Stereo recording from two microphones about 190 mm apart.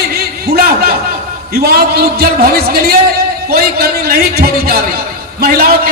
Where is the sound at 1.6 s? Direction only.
55° right (ahead or behind).